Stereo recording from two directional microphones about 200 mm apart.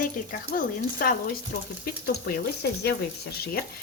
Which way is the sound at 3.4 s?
50° left (ahead or behind).